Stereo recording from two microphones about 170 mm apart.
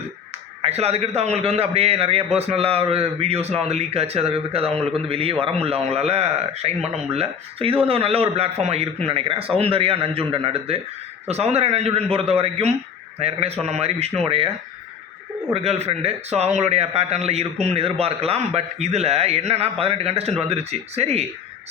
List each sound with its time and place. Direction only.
0.6 s a man's voice: 40° right (ahead or behind)
15.5 s a man's voice: 35° right (ahead or behind)